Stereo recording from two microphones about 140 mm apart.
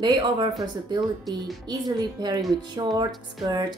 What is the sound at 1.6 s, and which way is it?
A woman's voice, 30° right (ahead or behind).